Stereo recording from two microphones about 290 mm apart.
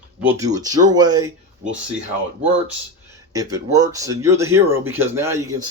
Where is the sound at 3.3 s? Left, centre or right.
Centre.